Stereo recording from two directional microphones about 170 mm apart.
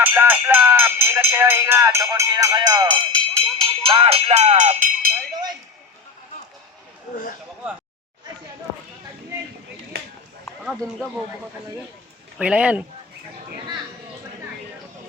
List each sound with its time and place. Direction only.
0.0 s speech: 10° right (ahead or behind); by 5.1 s 50° right (ahead or behind)
12.4 s speech: 5° right (ahead or behind)